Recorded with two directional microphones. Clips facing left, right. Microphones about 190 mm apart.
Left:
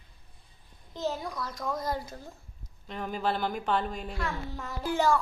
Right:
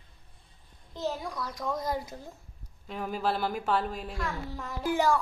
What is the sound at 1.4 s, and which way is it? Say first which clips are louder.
A child's voice: right 1 dB; 15° right (ahead or behind).